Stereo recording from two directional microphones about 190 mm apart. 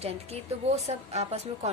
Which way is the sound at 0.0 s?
30° right (ahead or behind).